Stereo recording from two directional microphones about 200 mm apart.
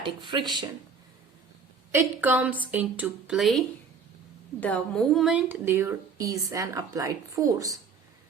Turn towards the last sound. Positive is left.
turn(degrees=-15)  # may be behind; listen again after turning